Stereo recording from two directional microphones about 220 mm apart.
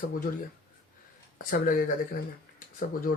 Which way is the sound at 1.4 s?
40° left (ahead or behind).